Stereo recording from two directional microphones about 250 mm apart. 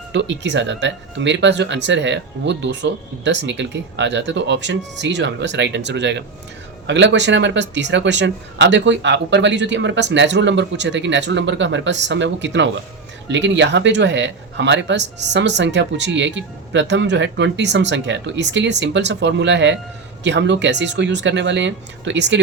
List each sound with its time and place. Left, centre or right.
0.1 s speech: right